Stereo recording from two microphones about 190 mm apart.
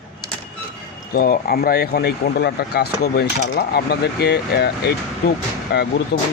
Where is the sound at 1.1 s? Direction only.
50° left (ahead or behind).